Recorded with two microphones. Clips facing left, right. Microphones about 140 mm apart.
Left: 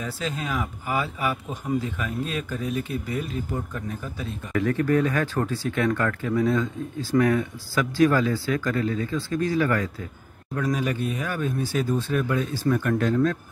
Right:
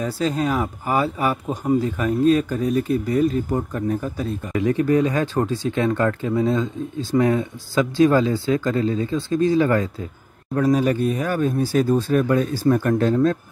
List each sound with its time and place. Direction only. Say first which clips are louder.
0.0 s speech: right 8 dB; 40° right (ahead or behind)
4.5 s speech: right 3 dB; 20° right (ahead or behind)
10.5 s speech: right 7 dB; 35° right (ahead or behind)